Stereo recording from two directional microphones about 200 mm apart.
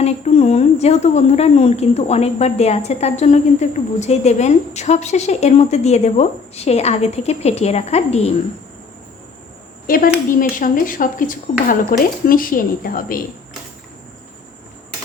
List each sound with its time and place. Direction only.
0.0 s speech: 30° left (ahead or behind)
9.8 s speech: 45° left (ahead or behind)